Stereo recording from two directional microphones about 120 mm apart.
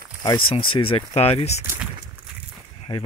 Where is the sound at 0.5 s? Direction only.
45° left (ahead or behind).